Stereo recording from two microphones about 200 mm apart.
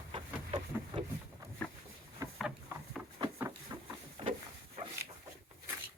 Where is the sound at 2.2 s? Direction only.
15° right (ahead or behind).